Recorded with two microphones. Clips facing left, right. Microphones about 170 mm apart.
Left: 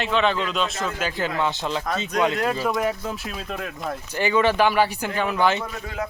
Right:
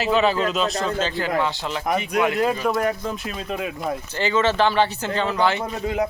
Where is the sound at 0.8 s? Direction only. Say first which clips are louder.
Right 4 dB; 30° right (ahead or behind).